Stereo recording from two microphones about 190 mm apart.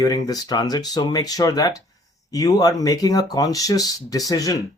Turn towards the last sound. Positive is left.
turn(degrees=20)  # may be behind; listen again after turning